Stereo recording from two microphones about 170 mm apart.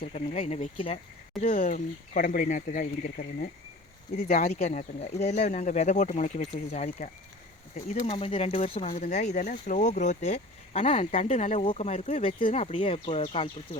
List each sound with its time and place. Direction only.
0.0 s speech: 40° left (ahead or behind)
1.4 s speech: 50° left (ahead or behind); by 9.0 s 35° left (ahead or behind)
9.0 s speech: 45° left (ahead or behind)